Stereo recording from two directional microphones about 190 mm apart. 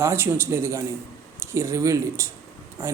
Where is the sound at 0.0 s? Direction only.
15° right (ahead or behind).